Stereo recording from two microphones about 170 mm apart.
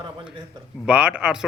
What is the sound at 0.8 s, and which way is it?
Speech, 5° right (ahead or behind).